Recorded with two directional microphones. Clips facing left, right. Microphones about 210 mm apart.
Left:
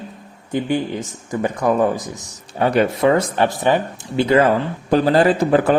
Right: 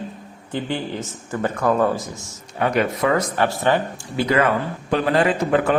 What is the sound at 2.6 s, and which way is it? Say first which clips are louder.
A man's voice: left 4 dB; 30° left (ahead or behind).